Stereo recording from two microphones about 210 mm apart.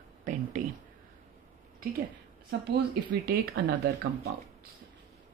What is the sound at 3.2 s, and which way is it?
Speech, 45° right (ahead or behind).